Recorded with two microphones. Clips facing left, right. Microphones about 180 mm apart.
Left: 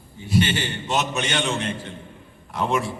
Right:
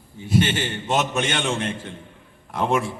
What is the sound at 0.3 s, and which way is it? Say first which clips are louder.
A man's voice: right 1 dB; 50° right (ahead or behind).